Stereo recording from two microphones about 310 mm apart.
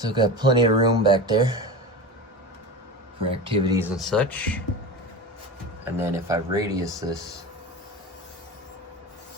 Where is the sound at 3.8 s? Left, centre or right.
Centre.